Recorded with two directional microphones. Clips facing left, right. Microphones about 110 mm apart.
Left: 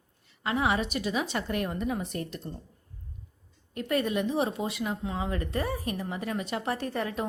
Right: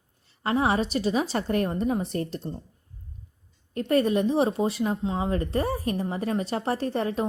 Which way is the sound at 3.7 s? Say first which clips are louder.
Right 6 dB; 35° right (ahead or behind).